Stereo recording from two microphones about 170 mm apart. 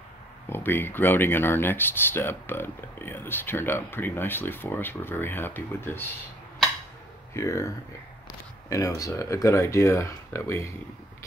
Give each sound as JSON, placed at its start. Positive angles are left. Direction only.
{"t": 0.5, "sound": "speech", "side_deg": 10}
{"t": 7.3, "sound": "speech", "side_deg": 15}